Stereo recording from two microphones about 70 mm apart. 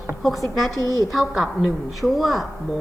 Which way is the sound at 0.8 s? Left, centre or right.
Left.